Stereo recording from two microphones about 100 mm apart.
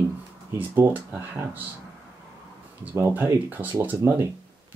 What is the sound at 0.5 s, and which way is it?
Speech, 20° right (ahead or behind).